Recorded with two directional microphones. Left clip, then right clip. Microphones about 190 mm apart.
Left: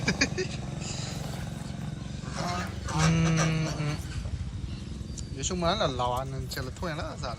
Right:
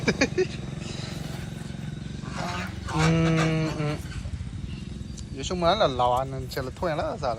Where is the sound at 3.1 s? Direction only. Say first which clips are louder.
Right 4 dB; 10° left (ahead or behind).